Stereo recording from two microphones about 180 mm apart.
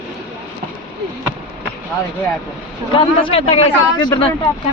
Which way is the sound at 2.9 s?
30° left (ahead or behind).